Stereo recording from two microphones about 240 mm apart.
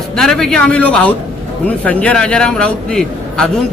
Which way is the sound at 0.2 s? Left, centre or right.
Centre.